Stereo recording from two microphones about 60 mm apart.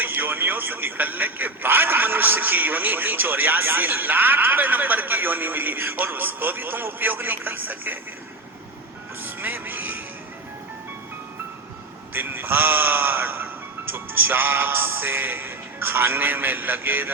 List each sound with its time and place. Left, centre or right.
0.0 s speech: right
9.2 s music: right
12.1 s speech: right